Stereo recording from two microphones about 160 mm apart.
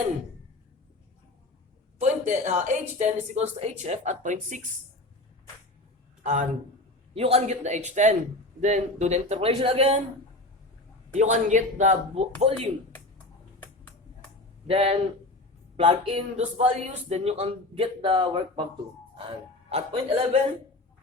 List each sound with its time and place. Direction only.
2.0 s a woman's voice: 50° right (ahead or behind)
6.2 s a man's voice: 50° right (ahead or behind)
7.1 s a woman's voice: 40° right (ahead or behind)
11.1 s a woman's voice: 50° right (ahead or behind)
14.7 s a man's voice: 40° right (ahead or behind)